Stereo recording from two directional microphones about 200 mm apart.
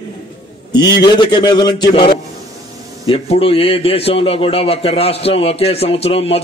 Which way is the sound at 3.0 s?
30° left (ahead or behind).